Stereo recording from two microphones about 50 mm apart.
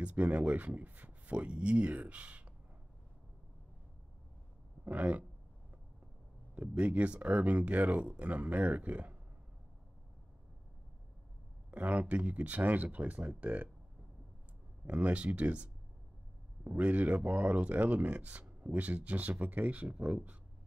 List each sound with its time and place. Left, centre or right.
0.0 s speech: right
4.9 s speech: right
6.5 s speech: right
11.7 s speech: right
14.9 s speech: right